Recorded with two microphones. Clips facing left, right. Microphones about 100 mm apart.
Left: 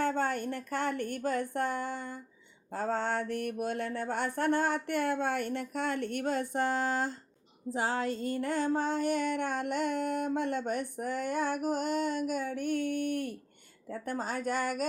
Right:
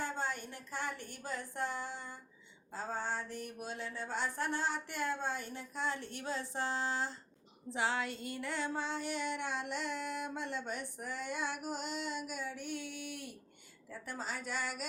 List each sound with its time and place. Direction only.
0.0 s mantra: 60° left (ahead or behind)
2.7 s mantra: 65° left (ahead or behind)
7.7 s female singing: 45° left (ahead or behind)